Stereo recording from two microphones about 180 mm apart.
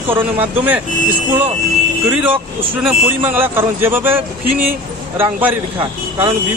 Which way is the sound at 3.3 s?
10° right (ahead or behind).